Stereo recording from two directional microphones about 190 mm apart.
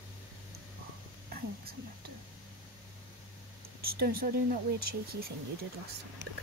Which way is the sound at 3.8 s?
55° right (ahead or behind).